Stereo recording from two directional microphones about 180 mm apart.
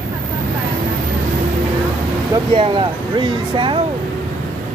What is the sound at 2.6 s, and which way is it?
Speech, 25° right (ahead or behind).